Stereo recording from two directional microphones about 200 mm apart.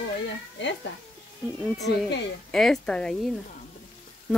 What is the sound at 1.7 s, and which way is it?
Speech, centre (ahead or behind).